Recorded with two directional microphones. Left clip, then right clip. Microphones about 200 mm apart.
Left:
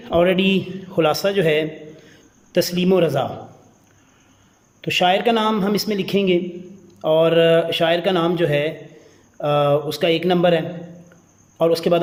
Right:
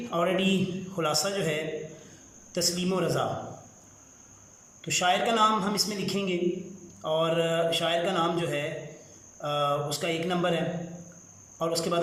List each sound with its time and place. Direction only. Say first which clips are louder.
0.1 s speech: left 10 dB; 40° left (ahead or behind)
4.8 s speech: left 8 dB; 40° left (ahead or behind)